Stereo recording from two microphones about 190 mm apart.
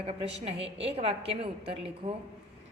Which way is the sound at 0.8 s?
30° right (ahead or behind).